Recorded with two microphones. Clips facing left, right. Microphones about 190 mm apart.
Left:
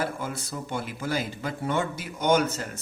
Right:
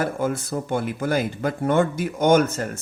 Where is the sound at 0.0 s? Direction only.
50° right (ahead or behind).